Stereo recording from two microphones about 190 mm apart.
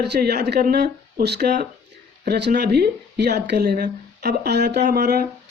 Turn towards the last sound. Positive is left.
turn(degrees=-55)  # may be behind; listen again after turning